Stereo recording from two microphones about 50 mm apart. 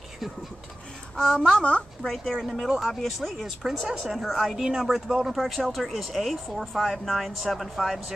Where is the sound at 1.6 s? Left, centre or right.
Left.